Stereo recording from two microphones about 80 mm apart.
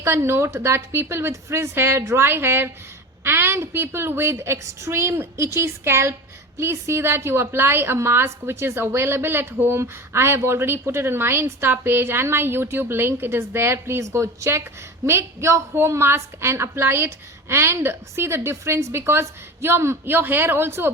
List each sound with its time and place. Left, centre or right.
0.0 s a woman's voice: right